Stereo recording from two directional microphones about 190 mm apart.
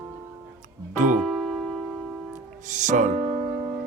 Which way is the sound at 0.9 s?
40° right (ahead or behind).